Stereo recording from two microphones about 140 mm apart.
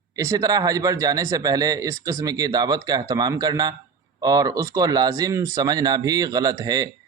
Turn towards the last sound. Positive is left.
turn(degrees=-30)  # may be behind; listen again after turning